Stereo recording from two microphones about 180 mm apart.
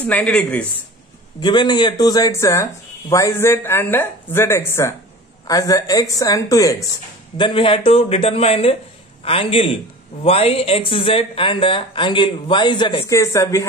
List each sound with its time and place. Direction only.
0.0 s speech: 10° left (ahead or behind)
1.4 s speech: 25° left (ahead or behind)